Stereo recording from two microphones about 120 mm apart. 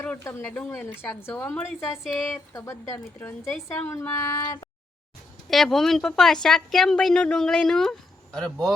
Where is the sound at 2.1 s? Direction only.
25° left (ahead or behind).